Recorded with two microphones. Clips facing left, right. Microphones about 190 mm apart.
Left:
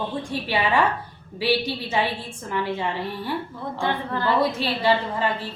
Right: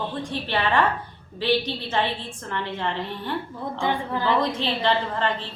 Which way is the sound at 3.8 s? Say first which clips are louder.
Even; 15° right (ahead or behind).